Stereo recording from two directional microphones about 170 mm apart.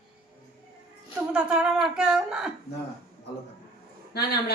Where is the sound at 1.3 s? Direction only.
5° right (ahead or behind).